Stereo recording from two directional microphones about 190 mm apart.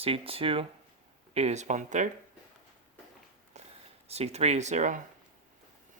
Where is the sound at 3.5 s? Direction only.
35° right (ahead or behind).